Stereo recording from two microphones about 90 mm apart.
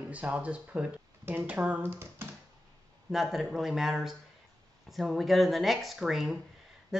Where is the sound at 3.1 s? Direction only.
Centre (ahead or behind).